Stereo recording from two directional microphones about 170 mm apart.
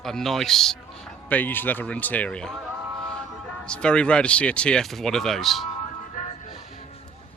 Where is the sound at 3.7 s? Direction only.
5° left (ahead or behind).